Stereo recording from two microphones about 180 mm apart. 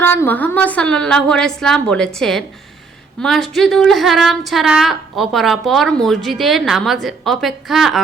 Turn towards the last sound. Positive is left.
turn(degrees=0)  # may be behind; listen again after turning